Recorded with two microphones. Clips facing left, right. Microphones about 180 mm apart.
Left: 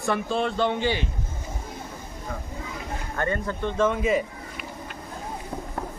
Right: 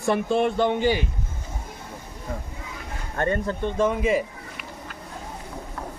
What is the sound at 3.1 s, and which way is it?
Speech, 25° right (ahead or behind).